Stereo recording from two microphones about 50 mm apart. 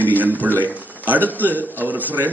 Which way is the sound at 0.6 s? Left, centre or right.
Right.